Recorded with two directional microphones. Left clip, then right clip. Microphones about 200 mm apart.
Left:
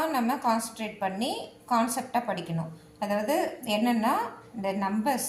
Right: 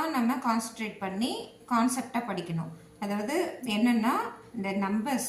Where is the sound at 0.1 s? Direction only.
50° left (ahead or behind).